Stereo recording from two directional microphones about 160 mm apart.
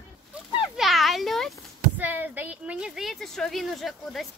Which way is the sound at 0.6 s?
Centre (ahead or behind).